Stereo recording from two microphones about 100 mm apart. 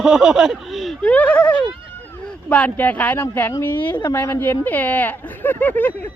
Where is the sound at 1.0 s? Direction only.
15° left (ahead or behind).